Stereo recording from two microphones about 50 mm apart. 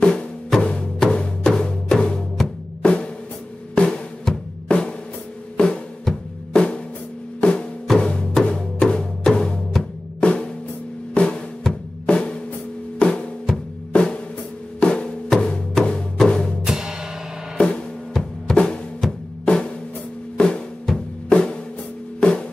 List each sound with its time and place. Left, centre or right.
0.0 s music: centre
2.8 s drum: left
7.3 s music: left
10.2 s drum: centre
13.0 s music: left
13.9 s drum: centre
14.8 s music: centre
16.6 s music: centre
17.6 s music: centre
19.4 s drum: centre
22.2 s music: centre